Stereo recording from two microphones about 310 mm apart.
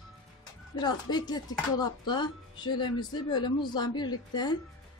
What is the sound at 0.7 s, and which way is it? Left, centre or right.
A woman's voice, centre.